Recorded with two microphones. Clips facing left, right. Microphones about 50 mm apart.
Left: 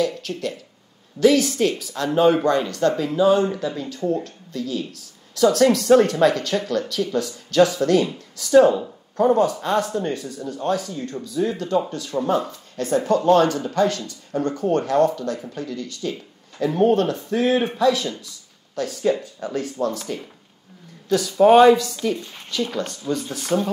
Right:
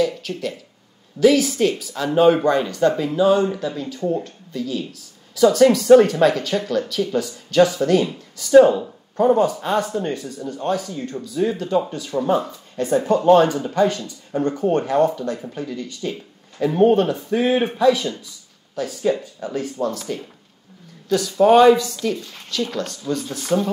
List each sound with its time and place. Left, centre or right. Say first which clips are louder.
0.0 s a sound: right 2 dB; centre
1.2 s speech: right 1 dB; centre
21.4 s speech: even; centre
22.1 s speech: even; left